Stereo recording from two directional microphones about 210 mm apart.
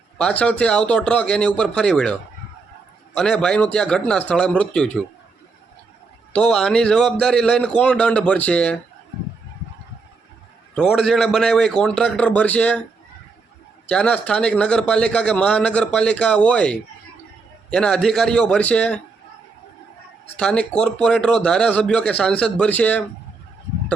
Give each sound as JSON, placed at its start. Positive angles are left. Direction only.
{"t": 0.2, "sound": "speech", "side_deg": 5}
{"t": 3.2, "sound": "speech", "side_deg": 5}
{"t": 6.3, "sound": "speech", "side_deg": 5}
{"t": 10.8, "sound": "speech", "side_deg": 0}
{"t": 13.8, "sound": "speech", "side_deg": 5}
{"t": 20.3, "sound": "speech", "side_deg": 5}